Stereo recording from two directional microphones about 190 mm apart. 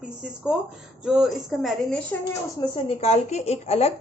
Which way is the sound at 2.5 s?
30° left (ahead or behind).